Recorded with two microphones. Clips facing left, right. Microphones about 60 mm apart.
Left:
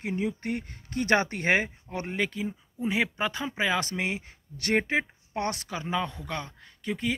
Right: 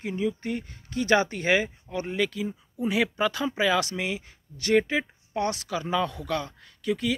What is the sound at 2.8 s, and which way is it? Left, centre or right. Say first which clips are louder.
Speech: right 3 dB; left.